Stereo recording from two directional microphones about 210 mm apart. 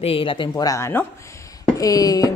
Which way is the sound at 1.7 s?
15° left (ahead or behind).